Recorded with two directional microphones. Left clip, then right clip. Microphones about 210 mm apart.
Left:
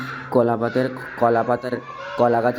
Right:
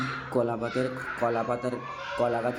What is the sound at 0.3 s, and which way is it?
Speech, 15° left (ahead or behind).